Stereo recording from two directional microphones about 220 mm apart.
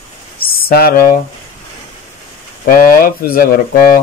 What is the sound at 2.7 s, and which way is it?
Speech, 40° left (ahead or behind).